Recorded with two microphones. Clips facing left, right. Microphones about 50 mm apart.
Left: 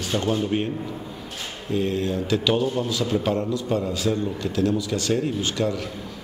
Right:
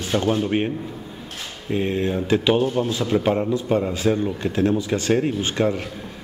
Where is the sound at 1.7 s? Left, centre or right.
Right.